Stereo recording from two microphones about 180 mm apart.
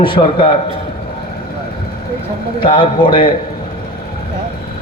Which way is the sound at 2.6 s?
30° left (ahead or behind).